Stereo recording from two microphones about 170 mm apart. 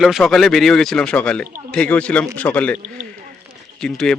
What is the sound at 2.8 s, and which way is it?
Speech, 45° right (ahead or behind).